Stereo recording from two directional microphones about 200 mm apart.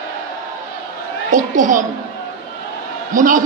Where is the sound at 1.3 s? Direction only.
40° right (ahead or behind).